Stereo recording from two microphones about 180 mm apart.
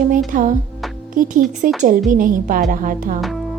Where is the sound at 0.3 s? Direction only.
50° right (ahead or behind).